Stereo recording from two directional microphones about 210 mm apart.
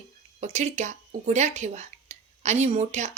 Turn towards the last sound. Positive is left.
turn(degrees=-35)  # may be behind; listen again after turning